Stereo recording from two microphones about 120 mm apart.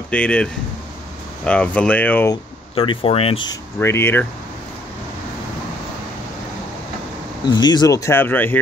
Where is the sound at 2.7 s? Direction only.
50° left (ahead or behind).